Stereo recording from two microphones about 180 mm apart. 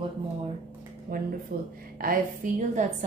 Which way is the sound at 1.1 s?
55° right (ahead or behind).